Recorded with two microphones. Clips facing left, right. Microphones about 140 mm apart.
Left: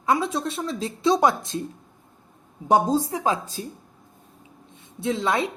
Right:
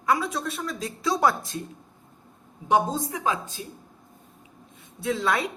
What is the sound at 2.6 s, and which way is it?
A woman's voice, 40° left (ahead or behind).